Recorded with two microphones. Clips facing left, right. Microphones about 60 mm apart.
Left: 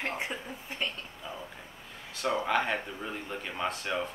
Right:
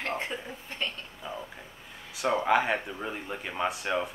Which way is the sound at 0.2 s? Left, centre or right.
Centre.